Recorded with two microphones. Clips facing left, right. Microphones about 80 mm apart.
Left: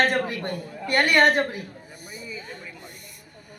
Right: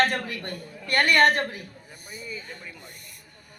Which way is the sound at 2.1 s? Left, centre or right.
Centre.